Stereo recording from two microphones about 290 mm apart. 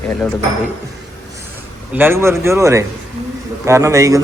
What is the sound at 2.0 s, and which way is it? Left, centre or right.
A man's voice, centre.